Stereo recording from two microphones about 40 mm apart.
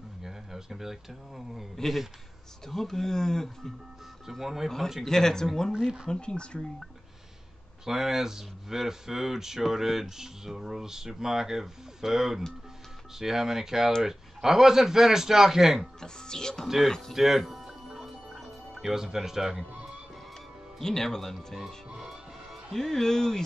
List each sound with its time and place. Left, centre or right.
0.2 s speech: centre
2.7 s speech: centre
4.3 s speech: centre
5.0 s speech: centre
7.8 s speech: centre
16.0 s speech: centre
17.1 s music: centre
20.8 s speech: centre
21.9 s music: centre
22.8 s speech: centre